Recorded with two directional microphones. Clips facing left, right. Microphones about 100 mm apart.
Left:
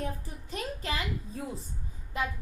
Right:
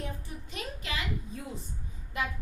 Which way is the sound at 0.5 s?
35° left (ahead or behind).